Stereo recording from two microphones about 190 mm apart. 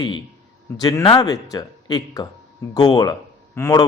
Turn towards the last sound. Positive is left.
turn(degrees=15)  # may be behind; listen again after turning